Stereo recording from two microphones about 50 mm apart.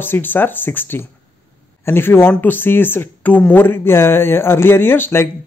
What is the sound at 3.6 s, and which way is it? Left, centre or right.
Speech, left.